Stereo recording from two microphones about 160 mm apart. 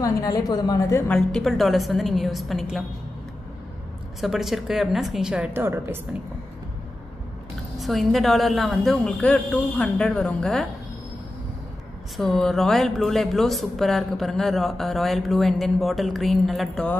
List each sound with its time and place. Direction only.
0.0 s a woman's voice: 20° left (ahead or behind)
1.0 s speech: 5° left (ahead or behind)
4.2 s speech: centre (ahead or behind)
7.8 s speech: centre (ahead or behind)
12.2 s speech: centre (ahead or behind)